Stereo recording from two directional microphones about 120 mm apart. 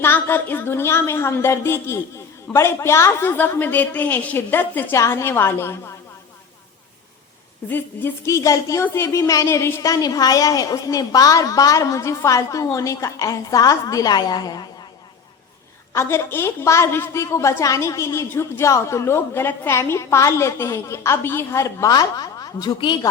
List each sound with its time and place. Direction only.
0.0 s a woman's voice: 20° left (ahead or behind)
7.7 s a woman's voice: 15° left (ahead or behind); by 14.7 s 35° left (ahead or behind)
15.9 s a woman's voice: 20° left (ahead or behind)